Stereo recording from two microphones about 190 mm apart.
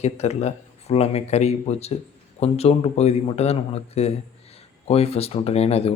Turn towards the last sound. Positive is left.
turn(degrees=30)  # may be behind; listen again after turning